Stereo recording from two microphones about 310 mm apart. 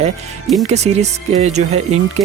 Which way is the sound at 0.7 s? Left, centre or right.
Right.